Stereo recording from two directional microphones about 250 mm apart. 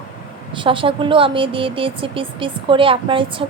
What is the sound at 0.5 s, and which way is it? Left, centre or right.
Speech, centre.